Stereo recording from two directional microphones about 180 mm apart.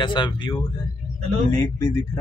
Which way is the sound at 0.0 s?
25° left (ahead or behind).